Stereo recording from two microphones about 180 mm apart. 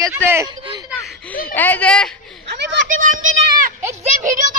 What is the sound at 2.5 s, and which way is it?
Speech, 75° right (ahead or behind).